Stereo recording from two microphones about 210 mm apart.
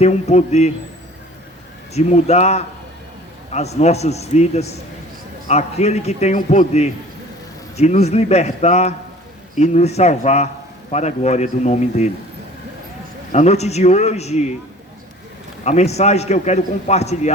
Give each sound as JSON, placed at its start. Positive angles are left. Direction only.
{"t": 0.0, "sound": "a man's voice", "side_deg": 30}
{"t": 1.9, "sound": "a man's voice", "side_deg": 30}
{"t": 13.3, "sound": "a man's voice", "side_deg": 30}
{"t": 15.6, "sound": "a man's voice", "side_deg": 30}